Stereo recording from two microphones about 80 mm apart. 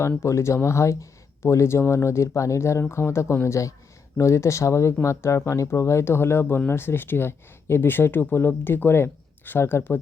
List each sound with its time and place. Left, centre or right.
0.2 s speech: left